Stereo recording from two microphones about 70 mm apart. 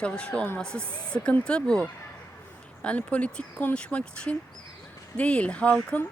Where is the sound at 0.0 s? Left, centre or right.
Centre.